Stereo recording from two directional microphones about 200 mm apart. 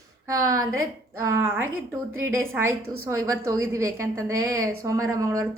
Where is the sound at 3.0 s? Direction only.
15° right (ahead or behind).